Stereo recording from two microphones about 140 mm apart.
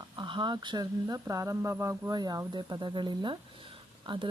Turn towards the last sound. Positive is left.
turn(degrees=-40)  # may be behind; listen again after turning